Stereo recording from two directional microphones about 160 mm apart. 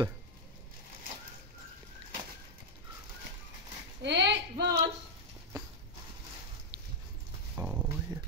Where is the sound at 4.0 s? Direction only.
90° right.